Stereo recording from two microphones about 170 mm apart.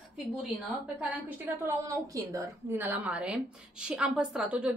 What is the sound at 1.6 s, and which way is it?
A woman's voice, 20° right (ahead or behind).